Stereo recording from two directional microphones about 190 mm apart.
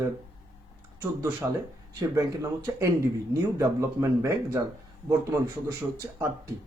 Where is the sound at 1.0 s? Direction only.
15° right (ahead or behind).